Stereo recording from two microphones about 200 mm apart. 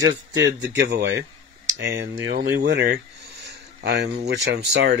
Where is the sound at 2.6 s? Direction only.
55° right (ahead or behind).